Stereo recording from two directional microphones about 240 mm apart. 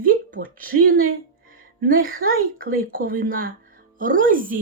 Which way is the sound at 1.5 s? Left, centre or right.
Right.